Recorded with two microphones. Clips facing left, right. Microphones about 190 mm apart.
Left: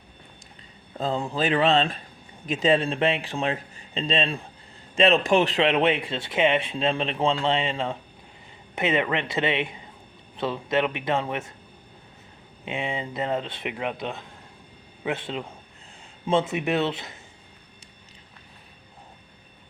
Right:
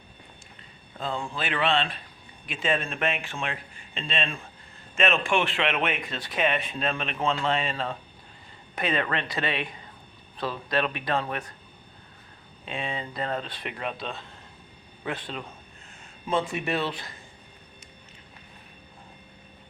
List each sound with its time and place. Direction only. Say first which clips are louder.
0.9 s a man's voice: left 5 dB; 40° left (ahead or behind); by 11.5 s 25° left (ahead or behind)
12.6 s a man's voice: left 3 dB; 20° left (ahead or behind)